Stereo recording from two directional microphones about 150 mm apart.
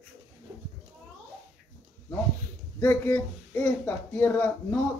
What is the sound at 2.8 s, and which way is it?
Speech, 15° left (ahead or behind).